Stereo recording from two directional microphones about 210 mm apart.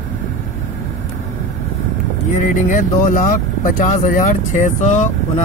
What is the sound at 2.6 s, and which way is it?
Speech, 40° left (ahead or behind).